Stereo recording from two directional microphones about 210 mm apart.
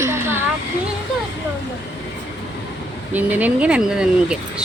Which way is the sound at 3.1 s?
10° right (ahead or behind).